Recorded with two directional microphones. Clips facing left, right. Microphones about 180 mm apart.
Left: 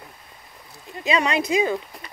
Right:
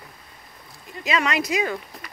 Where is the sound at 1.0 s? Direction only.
30° left (ahead or behind).